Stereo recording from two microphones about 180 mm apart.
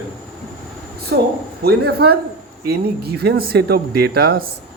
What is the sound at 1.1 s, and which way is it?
Speech, 65° right (ahead or behind).